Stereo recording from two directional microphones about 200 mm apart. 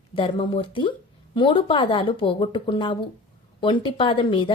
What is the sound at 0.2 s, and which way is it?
A woman's voice, 25° left (ahead or behind).